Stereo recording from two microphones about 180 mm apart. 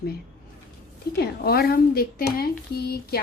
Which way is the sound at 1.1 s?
60° left (ahead or behind).